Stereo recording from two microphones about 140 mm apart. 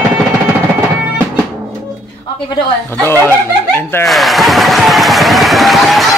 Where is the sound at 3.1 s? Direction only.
15° left (ahead or behind).